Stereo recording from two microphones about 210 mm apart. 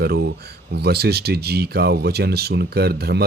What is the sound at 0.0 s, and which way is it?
Speech, 50° right (ahead or behind).